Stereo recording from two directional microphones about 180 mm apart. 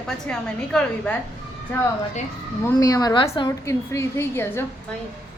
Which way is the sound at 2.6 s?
15° left (ahead or behind).